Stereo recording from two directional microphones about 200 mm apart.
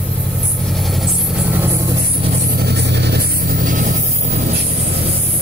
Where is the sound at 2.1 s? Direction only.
30° right (ahead or behind).